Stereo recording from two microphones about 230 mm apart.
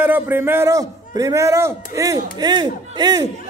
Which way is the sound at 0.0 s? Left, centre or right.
Centre.